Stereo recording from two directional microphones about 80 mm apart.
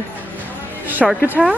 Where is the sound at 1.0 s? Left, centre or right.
Centre.